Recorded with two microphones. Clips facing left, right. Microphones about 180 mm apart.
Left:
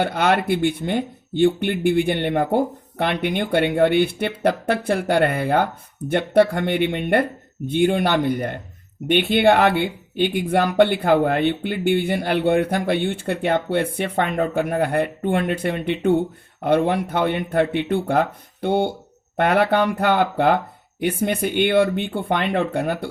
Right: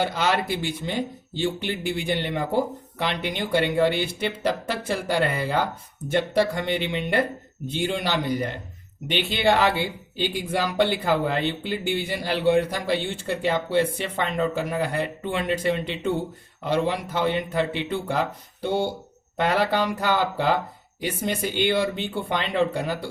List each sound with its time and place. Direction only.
0.0 s speech: 60° left (ahead or behind)